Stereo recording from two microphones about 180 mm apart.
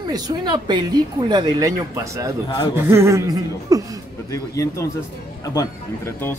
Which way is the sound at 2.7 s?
15° right (ahead or behind).